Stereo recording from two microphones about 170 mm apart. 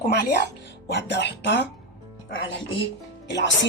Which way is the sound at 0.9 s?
90° left.